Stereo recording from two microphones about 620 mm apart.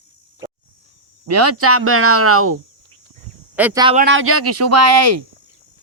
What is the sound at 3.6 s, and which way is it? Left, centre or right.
Speech, centre.